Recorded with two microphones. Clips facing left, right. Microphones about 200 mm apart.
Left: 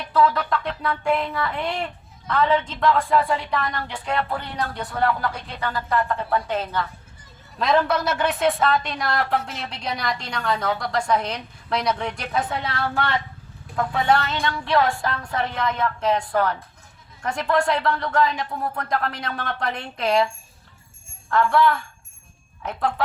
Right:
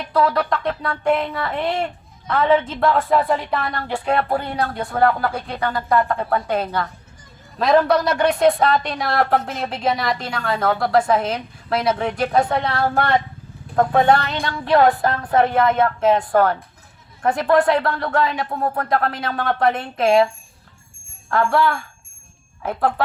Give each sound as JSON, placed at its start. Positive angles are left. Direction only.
{"t": 0.1, "sound": "speech", "side_deg": -40}